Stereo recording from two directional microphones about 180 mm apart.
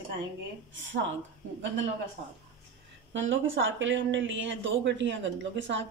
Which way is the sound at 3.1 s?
90° right.